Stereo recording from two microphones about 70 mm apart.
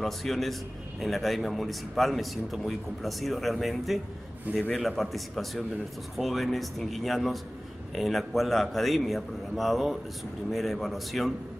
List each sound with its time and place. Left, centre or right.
0.0 s a man's voice: centre